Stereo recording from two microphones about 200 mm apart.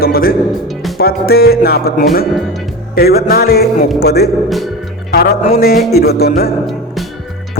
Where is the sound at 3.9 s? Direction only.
55° left (ahead or behind).